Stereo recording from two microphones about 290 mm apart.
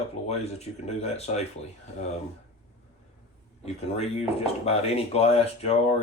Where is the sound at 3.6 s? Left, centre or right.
Left.